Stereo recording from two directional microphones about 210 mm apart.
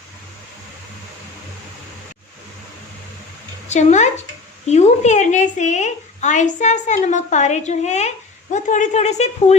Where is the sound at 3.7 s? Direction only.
35° left (ahead or behind).